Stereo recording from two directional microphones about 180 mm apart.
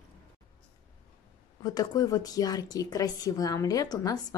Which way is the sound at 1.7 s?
20° left (ahead or behind).